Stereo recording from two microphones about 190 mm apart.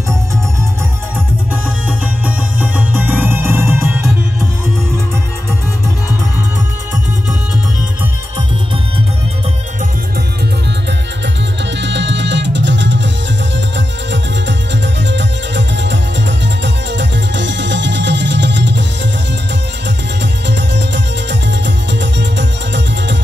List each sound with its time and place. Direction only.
1.5 s music: 10° right (ahead or behind)
11.8 s music: 70° right (ahead or behind)
14.7 s music: 70° right (ahead or behind)
20.4 s music: 65° right (ahead or behind)